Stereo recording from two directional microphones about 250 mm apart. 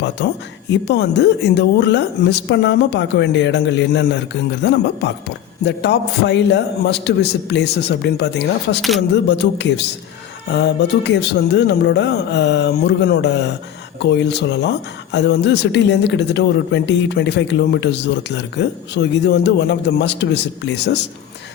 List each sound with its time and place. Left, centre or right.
0.7 s speech: left